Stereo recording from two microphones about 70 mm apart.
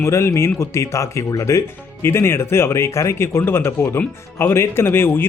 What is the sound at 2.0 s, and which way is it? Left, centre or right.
Speech, left.